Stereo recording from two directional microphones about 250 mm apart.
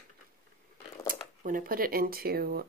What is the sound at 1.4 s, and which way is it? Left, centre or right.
Speech, right.